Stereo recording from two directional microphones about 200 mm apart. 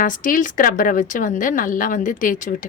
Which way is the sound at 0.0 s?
40° left (ahead or behind).